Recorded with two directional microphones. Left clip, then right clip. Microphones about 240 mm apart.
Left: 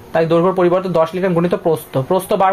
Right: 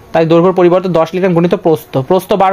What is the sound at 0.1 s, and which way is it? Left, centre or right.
Speech, right.